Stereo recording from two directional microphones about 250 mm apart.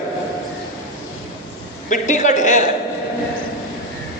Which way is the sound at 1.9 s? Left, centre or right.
Left.